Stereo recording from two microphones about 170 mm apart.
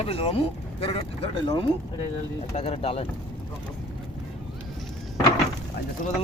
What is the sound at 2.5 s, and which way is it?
Speech, 40° left (ahead or behind).